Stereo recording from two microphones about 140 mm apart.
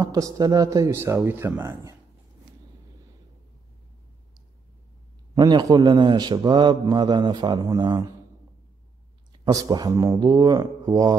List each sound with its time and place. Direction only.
0.0 s speech: 25° right (ahead or behind)
5.3 s a man's voice: 30° right (ahead or behind)
9.4 s speech: 30° right (ahead or behind)